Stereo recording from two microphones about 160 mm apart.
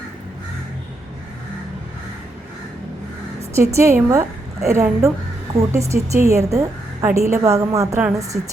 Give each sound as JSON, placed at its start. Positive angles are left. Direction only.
{"t": 3.5, "sound": "a woman's voice", "side_deg": -20}
{"t": 8.3, "sound": "a woman's voice", "side_deg": -5}